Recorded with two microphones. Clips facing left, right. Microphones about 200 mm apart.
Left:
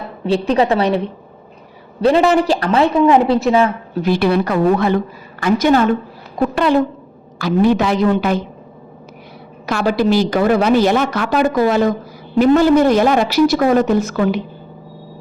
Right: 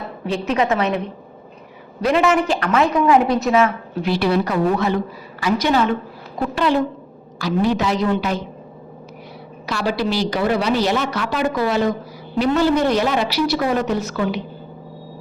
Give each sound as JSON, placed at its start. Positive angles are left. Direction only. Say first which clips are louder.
{"t": 0.3, "sound": "a man's voice", "louder": "left 5 dB", "side_deg": 35}
{"t": 4.0, "sound": "a woman's voice", "louder": "left 3 dB", "side_deg": 50}
{"t": 7.3, "sound": "a woman's voice", "louder": "left 5 dB", "side_deg": 55}
{"t": 9.6, "sound": "a woman's voice", "louder": "left 6 dB", "side_deg": 50}